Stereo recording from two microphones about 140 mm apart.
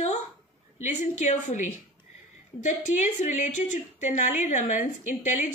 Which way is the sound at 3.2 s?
60° left (ahead or behind).